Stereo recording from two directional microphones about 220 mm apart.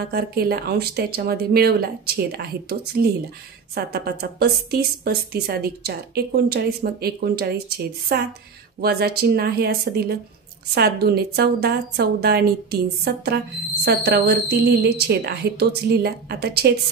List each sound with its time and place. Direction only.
0.0 s a woman's voice: 45° right (ahead or behind)